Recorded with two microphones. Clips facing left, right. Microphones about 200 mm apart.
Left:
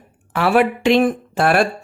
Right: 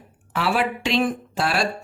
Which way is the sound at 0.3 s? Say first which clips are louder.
Left 7 dB; 55° left (ahead or behind).